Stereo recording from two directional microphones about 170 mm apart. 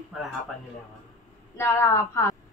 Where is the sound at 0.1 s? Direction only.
Centre (ahead or behind).